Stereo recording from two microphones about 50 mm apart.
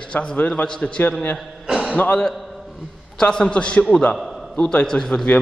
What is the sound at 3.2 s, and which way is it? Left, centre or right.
A man's voice, centre.